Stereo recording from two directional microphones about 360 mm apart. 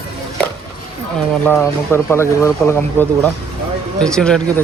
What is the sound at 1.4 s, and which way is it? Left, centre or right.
Speech, centre.